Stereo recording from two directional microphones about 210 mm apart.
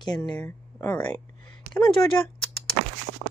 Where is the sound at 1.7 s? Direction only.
50° right (ahead or behind).